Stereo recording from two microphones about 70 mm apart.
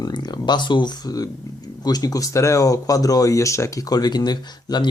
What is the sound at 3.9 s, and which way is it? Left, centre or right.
Speech, left.